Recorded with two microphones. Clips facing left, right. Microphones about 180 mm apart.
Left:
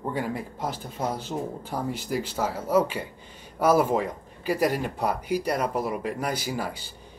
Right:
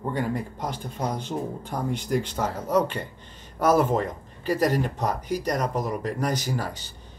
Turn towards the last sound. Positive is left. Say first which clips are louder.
# right 1 dB
turn(degrees=10)  # may be behind; listen again after turning